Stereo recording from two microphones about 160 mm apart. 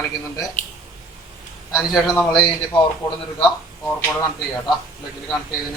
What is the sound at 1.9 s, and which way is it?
Speech, 5° left (ahead or behind).